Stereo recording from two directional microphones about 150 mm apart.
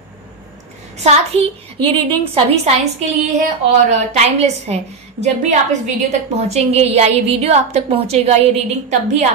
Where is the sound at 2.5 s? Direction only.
45° right (ahead or behind).